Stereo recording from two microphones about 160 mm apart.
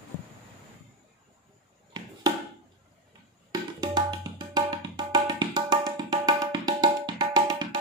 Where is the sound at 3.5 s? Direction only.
25° right (ahead or behind).